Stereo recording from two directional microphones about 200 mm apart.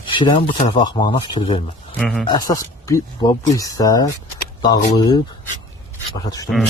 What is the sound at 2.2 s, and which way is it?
Speech, 20° left (ahead or behind).